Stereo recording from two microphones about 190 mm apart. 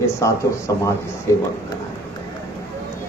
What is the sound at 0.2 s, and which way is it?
A man's voice, 15° left (ahead or behind).